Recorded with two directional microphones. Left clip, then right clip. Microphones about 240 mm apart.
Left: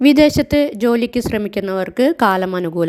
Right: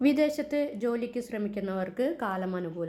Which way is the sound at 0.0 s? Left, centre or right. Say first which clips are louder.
Left 14 dB; left.